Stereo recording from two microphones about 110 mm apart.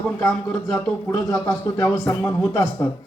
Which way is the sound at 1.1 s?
30° left (ahead or behind).